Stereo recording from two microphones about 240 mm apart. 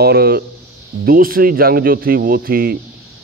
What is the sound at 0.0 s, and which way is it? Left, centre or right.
Speech, right.